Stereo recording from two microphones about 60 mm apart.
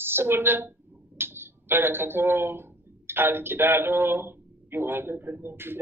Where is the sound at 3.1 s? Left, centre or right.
Right.